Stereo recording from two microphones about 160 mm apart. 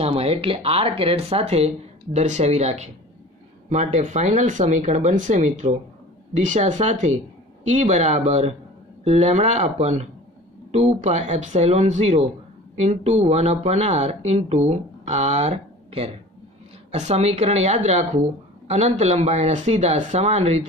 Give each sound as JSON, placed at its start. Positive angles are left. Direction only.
{"t": 0.0, "sound": "speech", "side_deg": -40}